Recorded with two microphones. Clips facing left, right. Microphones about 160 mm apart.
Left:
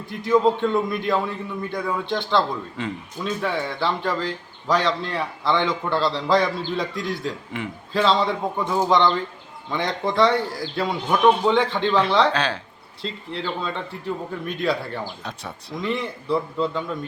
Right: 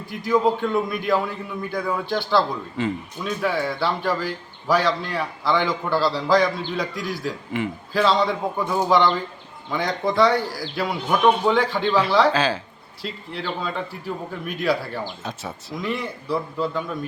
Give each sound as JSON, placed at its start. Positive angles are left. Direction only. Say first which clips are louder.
{"t": 0.3, "sound": "a man's voice", "louder": "left 1 dB", "side_deg": -5}
{"t": 7.0, "sound": "a man's voice", "louder": "even", "side_deg": 25}
{"t": 7.5, "sound": "a man's voice", "louder": "right 3 dB", "side_deg": 0}
{"t": 13.0, "sound": "a man's voice", "louder": "left 1 dB", "side_deg": 25}
{"t": 13.4, "sound": "a man's voice", "louder": "right 1 dB", "side_deg": -5}